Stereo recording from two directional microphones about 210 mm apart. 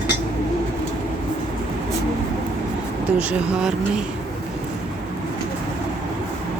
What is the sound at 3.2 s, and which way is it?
Speech, 5° right (ahead or behind).